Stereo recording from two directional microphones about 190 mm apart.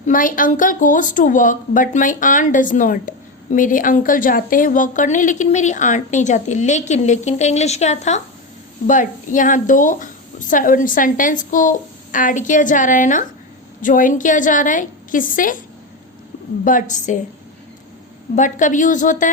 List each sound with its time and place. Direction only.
0.0 s a woman's voice: 45° left (ahead or behind)
16.6 s a woman's voice: 45° left (ahead or behind)
18.3 s a woman's voice: 40° left (ahead or behind)